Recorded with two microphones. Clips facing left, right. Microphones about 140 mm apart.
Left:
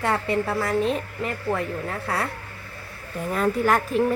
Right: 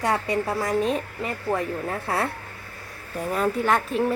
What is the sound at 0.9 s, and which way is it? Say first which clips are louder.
Speech: even; 5° right (ahead or behind).